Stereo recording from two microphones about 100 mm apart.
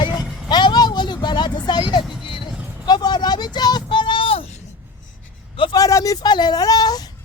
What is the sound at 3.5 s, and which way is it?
Child singing, 45° left (ahead or behind).